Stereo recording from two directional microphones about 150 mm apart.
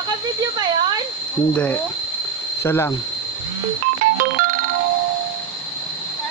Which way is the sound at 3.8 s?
65° right (ahead or behind).